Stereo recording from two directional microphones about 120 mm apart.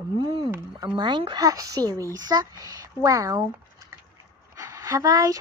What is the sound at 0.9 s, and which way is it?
Speech, 40° right (ahead or behind).